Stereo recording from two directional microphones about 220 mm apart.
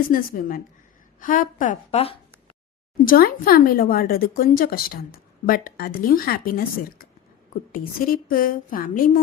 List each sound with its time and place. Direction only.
0.1 s speech: 40° left (ahead or behind)
3.0 s speech: 40° left (ahead or behind)